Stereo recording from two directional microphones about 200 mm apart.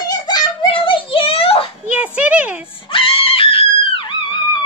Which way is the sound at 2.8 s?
25° left (ahead or behind).